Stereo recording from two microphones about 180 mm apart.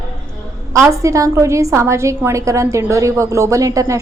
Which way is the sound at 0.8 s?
15° right (ahead or behind).